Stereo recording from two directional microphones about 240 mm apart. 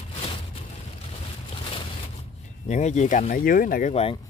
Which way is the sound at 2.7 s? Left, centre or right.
Left.